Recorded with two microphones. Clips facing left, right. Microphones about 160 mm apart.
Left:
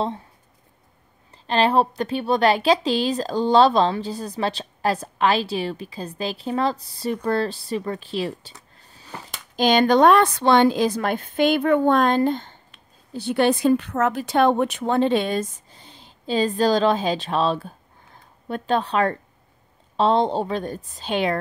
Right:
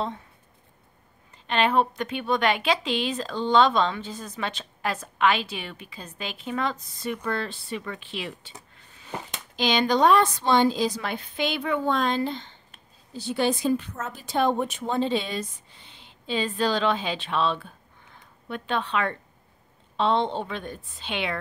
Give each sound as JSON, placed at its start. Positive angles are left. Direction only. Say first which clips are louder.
{"t": 1.3, "sound": "a woman's voice", "louder": "left 4 dB", "side_deg": 35}
{"t": 8.7, "sound": "a sound", "louder": "left 2 dB", "side_deg": 35}
{"t": 9.6, "sound": "a woman's voice", "louder": "left 6 dB", "side_deg": 50}
{"t": 13.1, "sound": "a woman's voice", "louder": "left 5 dB", "side_deg": 60}